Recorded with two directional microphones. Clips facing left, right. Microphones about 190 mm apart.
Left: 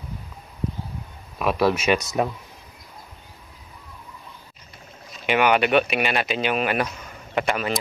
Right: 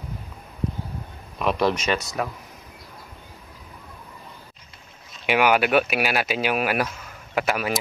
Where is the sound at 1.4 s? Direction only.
5° left (ahead or behind).